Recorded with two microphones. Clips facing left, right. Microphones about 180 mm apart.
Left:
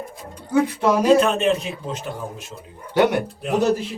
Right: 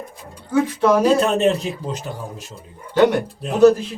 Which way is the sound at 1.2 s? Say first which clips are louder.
Right 2 dB; 35° right (ahead or behind).